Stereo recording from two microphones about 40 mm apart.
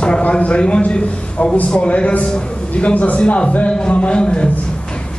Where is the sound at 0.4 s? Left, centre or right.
Left.